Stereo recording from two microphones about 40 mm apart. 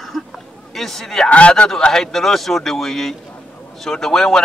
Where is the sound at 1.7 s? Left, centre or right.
Centre.